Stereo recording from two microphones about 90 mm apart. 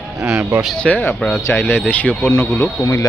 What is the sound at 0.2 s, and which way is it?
Speech, 10° right (ahead or behind).